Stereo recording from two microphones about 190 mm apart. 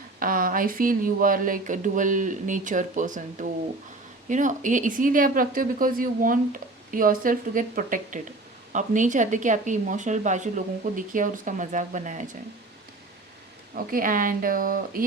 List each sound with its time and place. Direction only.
0.2 s speech: 45° right (ahead or behind)
13.9 s speech: 45° right (ahead or behind)